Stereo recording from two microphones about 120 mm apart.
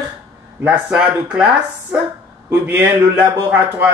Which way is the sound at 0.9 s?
10° right (ahead or behind).